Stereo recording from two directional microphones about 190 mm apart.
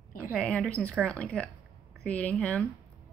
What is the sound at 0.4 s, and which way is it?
A woman's voice, 5° left (ahead or behind).